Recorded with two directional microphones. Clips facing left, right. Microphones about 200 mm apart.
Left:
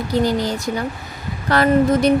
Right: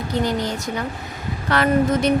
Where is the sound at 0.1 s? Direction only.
35° left (ahead or behind).